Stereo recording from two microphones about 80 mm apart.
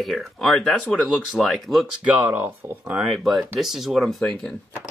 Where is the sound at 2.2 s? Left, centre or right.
Right.